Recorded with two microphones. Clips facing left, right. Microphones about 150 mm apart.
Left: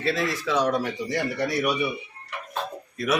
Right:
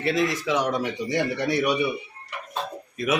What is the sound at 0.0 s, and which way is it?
Speech, 15° right (ahead or behind).